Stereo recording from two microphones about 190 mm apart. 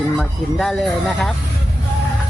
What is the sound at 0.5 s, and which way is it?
Speech, centre (ahead or behind).